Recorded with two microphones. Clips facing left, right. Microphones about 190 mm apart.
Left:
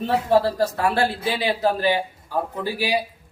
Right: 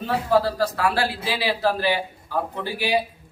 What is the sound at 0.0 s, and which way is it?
Speech, 25° left (ahead or behind).